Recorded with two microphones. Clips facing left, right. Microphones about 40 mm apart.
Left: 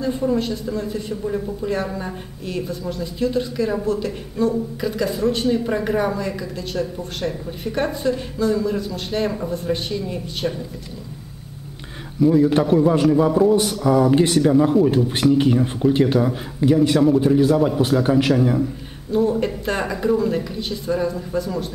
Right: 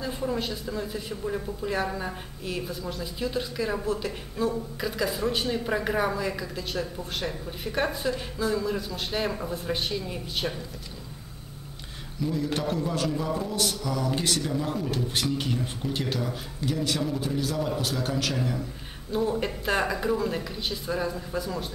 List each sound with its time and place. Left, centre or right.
0.0 s speech: centre
12.2 s a man's voice: left
19.1 s speech: centre